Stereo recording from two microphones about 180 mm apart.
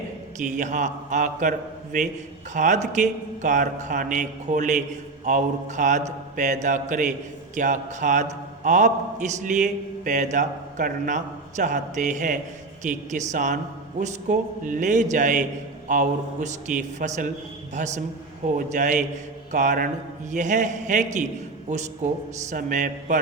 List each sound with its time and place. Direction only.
0.4 s a man's voice: 45° right (ahead or behind)
22.4 s a man's voice: 45° right (ahead or behind)